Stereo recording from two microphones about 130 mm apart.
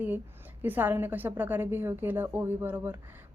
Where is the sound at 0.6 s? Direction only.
15° right (ahead or behind).